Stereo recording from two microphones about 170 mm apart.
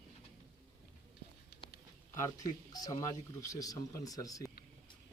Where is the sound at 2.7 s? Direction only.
20° left (ahead or behind).